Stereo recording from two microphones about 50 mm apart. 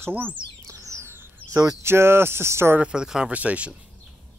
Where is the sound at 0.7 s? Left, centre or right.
Right.